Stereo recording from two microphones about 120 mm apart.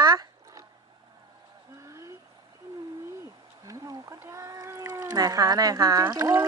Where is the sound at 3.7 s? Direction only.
25° right (ahead or behind).